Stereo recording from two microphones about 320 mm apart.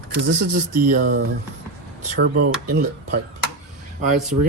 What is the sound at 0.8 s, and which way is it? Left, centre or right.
Speech, right.